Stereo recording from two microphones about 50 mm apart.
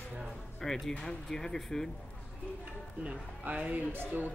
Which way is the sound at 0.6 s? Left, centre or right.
Centre.